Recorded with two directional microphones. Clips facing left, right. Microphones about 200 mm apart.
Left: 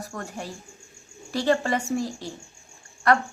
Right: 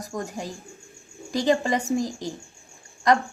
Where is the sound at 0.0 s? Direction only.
15° right (ahead or behind).